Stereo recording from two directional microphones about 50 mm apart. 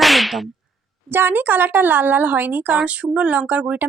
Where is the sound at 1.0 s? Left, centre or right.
Right.